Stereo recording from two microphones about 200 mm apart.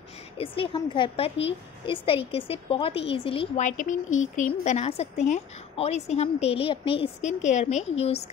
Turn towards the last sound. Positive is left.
turn(degrees=35)  # may be behind; listen again after turning